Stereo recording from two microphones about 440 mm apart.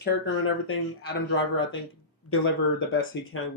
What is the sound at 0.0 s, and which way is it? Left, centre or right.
Speech, left.